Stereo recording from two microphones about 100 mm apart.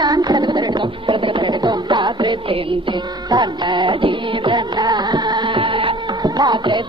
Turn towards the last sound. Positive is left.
turn(degrees=-50)  # may be behind; listen again after turning